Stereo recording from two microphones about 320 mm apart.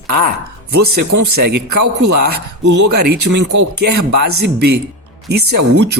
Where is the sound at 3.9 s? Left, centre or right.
Right.